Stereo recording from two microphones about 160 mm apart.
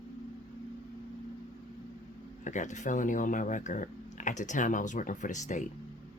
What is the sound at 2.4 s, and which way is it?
Speech, 50° left (ahead or behind).